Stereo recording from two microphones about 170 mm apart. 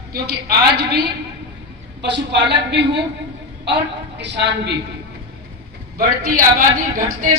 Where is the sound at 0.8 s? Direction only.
70° right (ahead or behind).